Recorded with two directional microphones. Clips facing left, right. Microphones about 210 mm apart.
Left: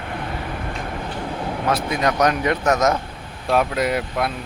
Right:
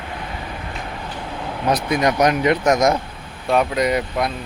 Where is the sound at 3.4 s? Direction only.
Centre (ahead or behind).